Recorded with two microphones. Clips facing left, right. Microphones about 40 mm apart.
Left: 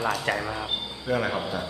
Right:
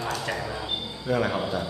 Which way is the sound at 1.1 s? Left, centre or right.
Centre.